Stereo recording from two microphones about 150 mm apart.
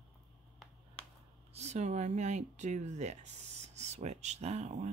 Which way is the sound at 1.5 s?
50° right (ahead or behind).